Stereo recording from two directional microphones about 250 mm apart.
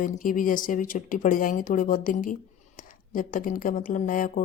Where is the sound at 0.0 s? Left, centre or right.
Left.